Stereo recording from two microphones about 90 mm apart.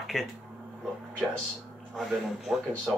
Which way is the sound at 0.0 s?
Centre (ahead or behind).